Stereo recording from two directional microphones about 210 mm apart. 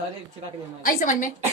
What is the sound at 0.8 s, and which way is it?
Speech, 40° left (ahead or behind).